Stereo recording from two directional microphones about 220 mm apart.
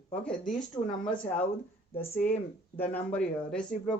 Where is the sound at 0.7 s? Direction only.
15° left (ahead or behind).